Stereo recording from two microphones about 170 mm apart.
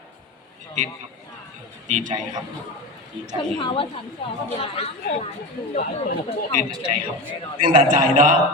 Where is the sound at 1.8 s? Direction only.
45° right (ahead or behind).